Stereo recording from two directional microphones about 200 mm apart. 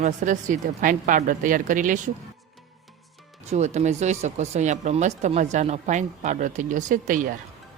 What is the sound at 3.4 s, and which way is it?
Speech, 35° right (ahead or behind).